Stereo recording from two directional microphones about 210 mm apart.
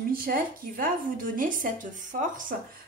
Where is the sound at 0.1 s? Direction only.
45° right (ahead or behind).